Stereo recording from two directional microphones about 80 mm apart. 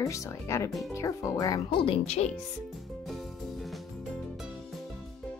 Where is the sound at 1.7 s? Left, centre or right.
Left.